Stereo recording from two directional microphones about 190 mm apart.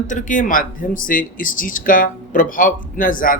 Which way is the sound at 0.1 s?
45° left (ahead or behind).